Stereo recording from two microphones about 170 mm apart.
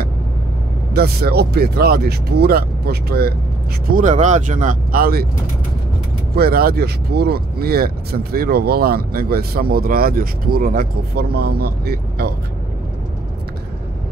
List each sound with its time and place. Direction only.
0.9 s speech: 65° right (ahead or behind)
3.9 s speech: 45° right (ahead or behind)
6.3 s speech: 65° right (ahead or behind)